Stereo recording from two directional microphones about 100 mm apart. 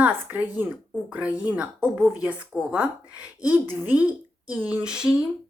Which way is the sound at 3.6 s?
25° right (ahead or behind).